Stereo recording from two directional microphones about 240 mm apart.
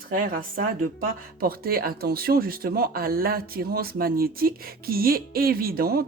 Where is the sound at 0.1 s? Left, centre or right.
Right.